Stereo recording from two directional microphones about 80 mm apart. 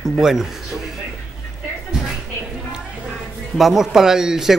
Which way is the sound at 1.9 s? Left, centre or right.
Centre.